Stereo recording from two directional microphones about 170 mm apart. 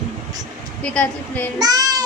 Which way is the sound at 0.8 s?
10° left (ahead or behind).